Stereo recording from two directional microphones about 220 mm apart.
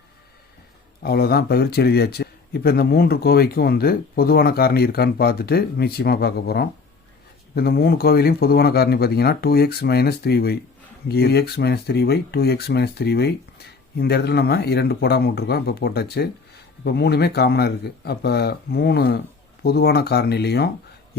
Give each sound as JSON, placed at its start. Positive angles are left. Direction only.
{"t": 1.0, "sound": "speech", "side_deg": 45}